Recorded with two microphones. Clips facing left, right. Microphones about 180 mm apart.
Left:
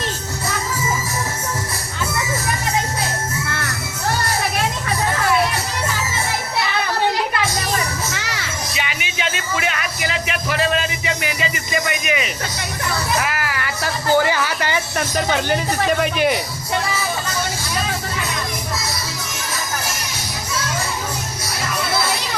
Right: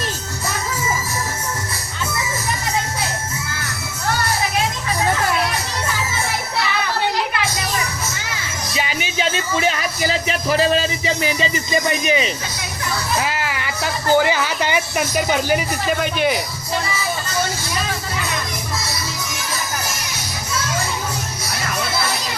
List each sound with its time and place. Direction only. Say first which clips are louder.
8.1 s children playing: left 2 dB; 75° left (ahead or behind)
8.7 s music: right 3 dB; 35° right (ahead or behind)
13.1 s a sound: even; 25° right (ahead or behind); by 16.4 s centre (ahead or behind)